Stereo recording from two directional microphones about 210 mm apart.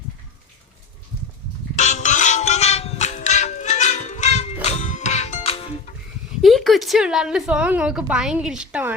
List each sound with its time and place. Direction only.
1.7 s music: 35° left (ahead or behind)
6.4 s a woman's voice: centre (ahead or behind)